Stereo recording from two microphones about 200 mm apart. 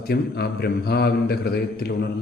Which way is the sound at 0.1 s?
55° left (ahead or behind).